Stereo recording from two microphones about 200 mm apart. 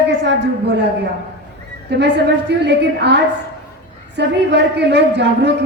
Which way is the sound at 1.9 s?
55° right (ahead or behind).